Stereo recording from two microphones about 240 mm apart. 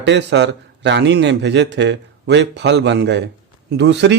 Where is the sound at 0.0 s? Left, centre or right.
Right.